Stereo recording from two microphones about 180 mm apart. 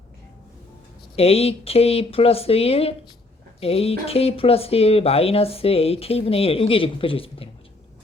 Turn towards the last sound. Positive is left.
turn(degrees=30)  # may be behind; listen again after turning